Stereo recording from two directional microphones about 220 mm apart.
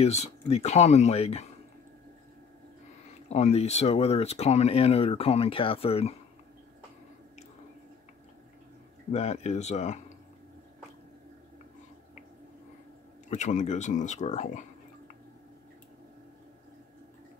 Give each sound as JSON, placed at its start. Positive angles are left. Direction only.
{"t": 0.0, "sound": "speech", "side_deg": 30}
{"t": 3.3, "sound": "speech", "side_deg": 30}
{"t": 9.1, "sound": "speech", "side_deg": 30}
{"t": 13.3, "sound": "speech", "side_deg": 35}